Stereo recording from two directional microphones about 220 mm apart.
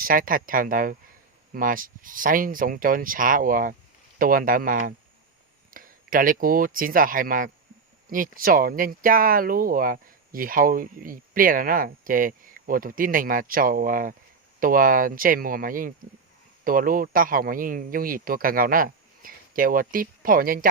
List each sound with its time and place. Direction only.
0.0 s speech: 40° right (ahead or behind)